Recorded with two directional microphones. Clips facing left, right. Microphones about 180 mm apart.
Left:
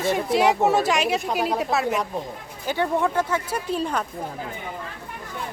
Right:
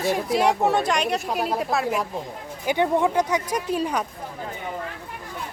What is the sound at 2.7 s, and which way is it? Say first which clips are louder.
Speech: right 2 dB; 15° right (ahead or behind).